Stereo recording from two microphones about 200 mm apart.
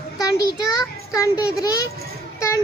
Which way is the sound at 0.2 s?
20° left (ahead or behind).